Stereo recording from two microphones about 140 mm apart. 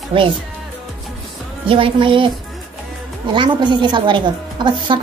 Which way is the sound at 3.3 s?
35° right (ahead or behind).